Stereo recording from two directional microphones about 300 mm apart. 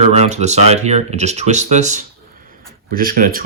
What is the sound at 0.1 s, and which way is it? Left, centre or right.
Speech, right.